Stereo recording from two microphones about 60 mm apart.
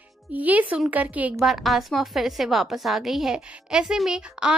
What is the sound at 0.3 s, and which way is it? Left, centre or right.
Speech, right.